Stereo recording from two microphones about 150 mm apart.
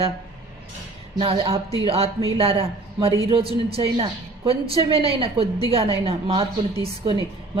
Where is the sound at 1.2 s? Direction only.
40° right (ahead or behind).